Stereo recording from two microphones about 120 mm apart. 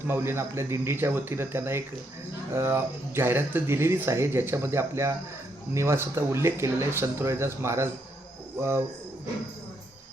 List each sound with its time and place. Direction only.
0.1 s speech: 20° right (ahead or behind)